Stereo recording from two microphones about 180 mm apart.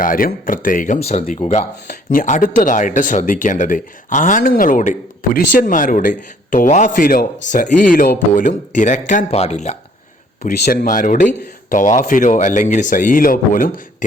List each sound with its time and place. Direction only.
0.0 s speech: 50° left (ahead or behind)
10.4 s speech: 50° left (ahead or behind)